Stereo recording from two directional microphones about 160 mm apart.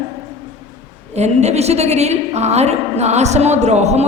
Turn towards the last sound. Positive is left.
turn(degrees=-45)  # may be behind; listen again after turning